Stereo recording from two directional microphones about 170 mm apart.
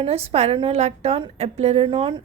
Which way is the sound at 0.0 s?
35° right (ahead or behind).